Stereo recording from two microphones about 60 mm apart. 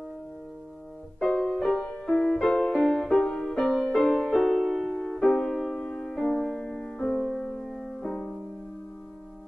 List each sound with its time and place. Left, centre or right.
1.2 s music: centre
1.9 s music: centre